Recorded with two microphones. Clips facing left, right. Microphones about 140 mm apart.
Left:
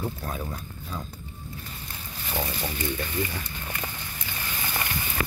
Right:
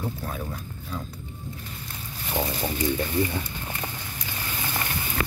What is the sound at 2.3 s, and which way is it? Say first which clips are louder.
Speech: right 3 dB; 20° right (ahead or behind).